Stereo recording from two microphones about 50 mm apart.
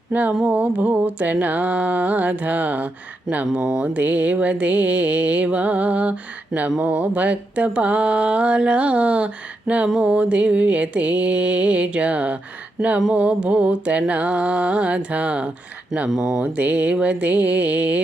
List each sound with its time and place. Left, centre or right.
0.1 s a sound: right
3.5 s mantra: centre
3.9 s mantra: right
12.8 s speech: centre
13.1 s mantra: right
16.0 s speech: centre
16.4 s mantra: right